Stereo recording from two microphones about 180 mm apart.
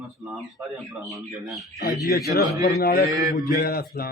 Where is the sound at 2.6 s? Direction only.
55° left (ahead or behind).